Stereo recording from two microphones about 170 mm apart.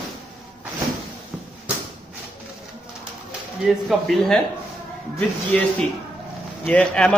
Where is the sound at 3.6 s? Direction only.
Centre (ahead or behind).